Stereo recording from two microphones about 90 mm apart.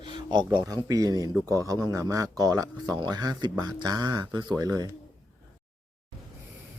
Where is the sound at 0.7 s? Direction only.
45° right (ahead or behind).